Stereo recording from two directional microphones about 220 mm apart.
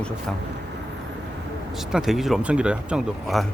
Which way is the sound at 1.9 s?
Centre (ahead or behind).